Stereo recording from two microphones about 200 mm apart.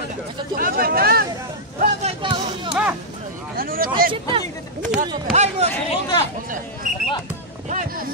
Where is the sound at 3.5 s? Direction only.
45° right (ahead or behind).